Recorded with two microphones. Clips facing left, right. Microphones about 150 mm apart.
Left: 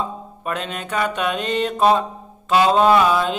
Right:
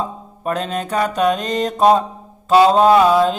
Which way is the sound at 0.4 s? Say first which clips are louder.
Right 6 dB; 40° right (ahead or behind).